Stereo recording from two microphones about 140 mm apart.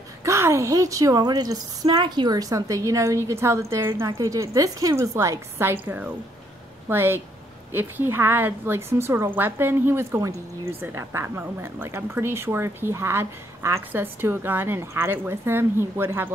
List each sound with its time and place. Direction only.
0.2 s a woman's voice: 20° right (ahead or behind)